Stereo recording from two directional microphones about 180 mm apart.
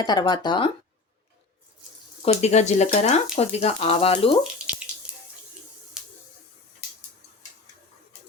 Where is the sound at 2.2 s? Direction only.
35° left (ahead or behind).